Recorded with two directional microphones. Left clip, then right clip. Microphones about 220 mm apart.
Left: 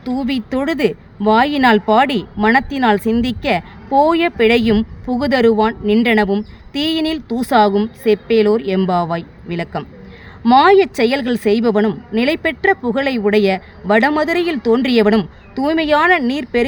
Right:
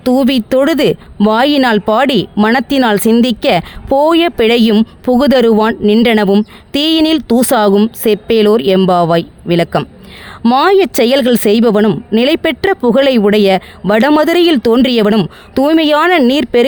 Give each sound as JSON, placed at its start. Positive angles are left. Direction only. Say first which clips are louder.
{"t": 0.0, "sound": "speech", "louder": "right 10 dB", "side_deg": -55}